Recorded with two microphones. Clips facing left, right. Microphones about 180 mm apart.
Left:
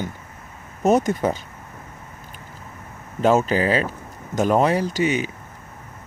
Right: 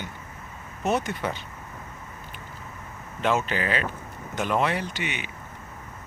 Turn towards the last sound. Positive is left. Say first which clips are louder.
# left 10 dB
turn(degrees=40)  # may be behind; listen again after turning